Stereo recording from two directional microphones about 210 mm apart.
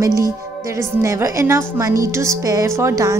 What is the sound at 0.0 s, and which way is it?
A woman's voice, 15° right (ahead or behind).